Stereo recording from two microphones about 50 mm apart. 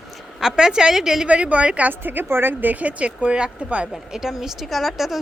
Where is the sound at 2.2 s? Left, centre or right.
Right.